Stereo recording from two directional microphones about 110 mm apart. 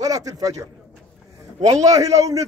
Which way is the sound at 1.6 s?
35° right (ahead or behind).